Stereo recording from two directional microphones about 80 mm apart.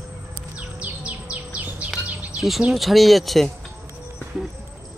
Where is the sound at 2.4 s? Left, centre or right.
Centre.